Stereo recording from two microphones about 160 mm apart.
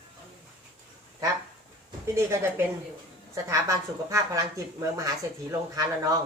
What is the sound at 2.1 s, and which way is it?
A woman's voice, 15° right (ahead or behind).